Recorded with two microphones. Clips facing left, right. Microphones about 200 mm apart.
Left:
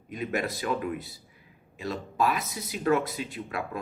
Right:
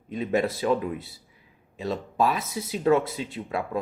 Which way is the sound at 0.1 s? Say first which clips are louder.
Right 5 dB; 30° right (ahead or behind).